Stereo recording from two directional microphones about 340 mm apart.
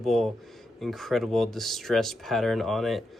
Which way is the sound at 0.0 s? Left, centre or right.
Centre.